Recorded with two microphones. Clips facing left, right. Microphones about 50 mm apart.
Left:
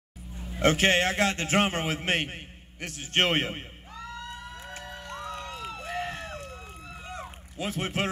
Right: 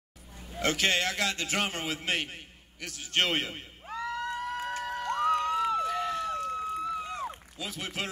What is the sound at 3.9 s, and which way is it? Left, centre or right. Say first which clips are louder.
Crowd: right 7 dB; right.